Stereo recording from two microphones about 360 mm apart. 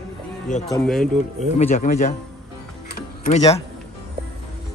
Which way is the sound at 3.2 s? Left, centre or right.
Centre.